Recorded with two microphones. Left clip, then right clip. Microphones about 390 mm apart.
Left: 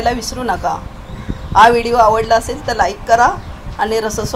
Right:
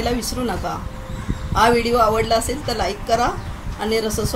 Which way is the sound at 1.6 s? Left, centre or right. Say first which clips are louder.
Left 6 dB; centre.